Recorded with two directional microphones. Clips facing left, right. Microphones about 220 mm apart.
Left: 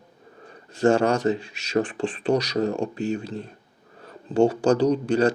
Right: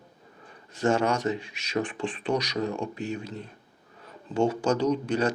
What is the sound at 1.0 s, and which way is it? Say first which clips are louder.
Speech: left 5 dB; 35° left (ahead or behind).